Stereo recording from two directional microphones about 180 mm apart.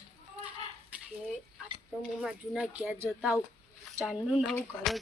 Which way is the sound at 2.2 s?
5° right (ahead or behind).